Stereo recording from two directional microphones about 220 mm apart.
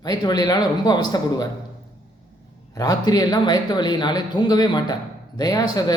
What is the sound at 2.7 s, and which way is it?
A man's voice, 15° left (ahead or behind).